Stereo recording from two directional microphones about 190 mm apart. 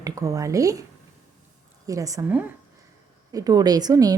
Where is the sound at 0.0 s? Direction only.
15° right (ahead or behind).